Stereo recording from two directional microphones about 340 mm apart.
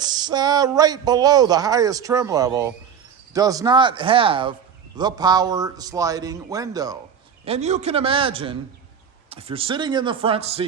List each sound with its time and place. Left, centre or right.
0.0 s speech: centre